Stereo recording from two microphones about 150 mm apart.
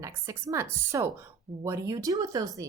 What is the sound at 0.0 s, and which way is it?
A woman's voice, 20° right (ahead or behind).